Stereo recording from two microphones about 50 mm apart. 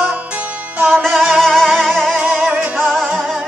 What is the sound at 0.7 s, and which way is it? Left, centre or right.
Music, right.